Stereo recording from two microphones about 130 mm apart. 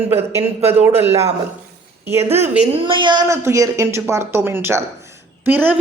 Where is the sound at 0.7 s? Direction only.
20° right (ahead or behind).